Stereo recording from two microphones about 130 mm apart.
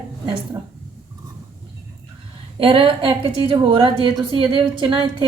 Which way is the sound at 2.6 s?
40° right (ahead or behind).